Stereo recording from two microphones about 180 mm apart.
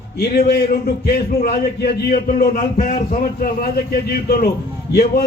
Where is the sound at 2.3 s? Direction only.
50° left (ahead or behind).